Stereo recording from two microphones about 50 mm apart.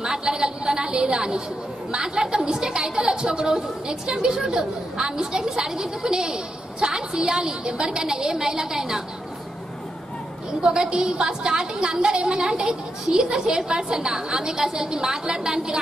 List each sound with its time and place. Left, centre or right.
0.0 s chatter: centre
1.9 s a woman's voice: centre
10.6 s a woman's voice: centre